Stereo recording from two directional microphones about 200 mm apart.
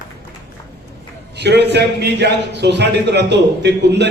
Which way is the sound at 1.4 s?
55° right (ahead or behind).